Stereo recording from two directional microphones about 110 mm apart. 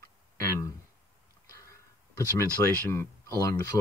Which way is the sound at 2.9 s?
25° left (ahead or behind).